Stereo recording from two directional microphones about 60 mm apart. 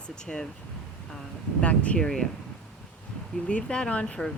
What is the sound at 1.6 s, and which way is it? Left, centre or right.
Speech, left.